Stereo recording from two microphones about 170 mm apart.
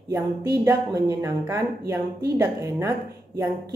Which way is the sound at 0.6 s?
15° right (ahead or behind).